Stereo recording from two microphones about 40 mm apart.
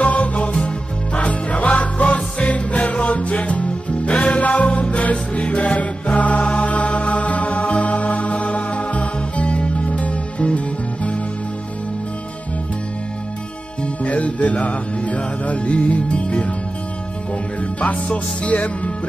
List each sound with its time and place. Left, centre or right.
0.0 s music: left
14.0 s music: left
17.7 s music: left